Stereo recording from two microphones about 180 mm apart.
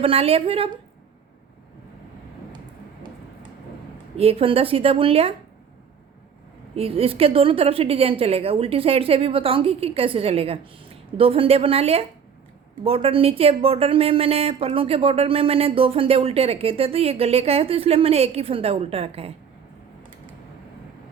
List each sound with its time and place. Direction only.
0.0 s a woman's voice: 30° right (ahead or behind)
4.2 s a woman's voice: 35° right (ahead or behind)
6.7 s a woman's voice: 30° right (ahead or behind)